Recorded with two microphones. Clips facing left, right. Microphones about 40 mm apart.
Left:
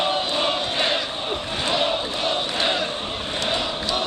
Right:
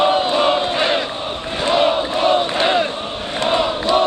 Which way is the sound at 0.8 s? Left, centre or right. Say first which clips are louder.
Right 4 dB; right.